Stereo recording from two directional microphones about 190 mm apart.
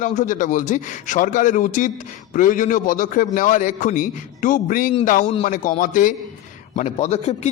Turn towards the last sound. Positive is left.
turn(degrees=35)  # may be behind; listen again after turning